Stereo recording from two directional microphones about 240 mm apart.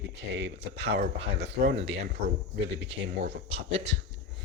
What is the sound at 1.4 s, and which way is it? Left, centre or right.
Speech, right.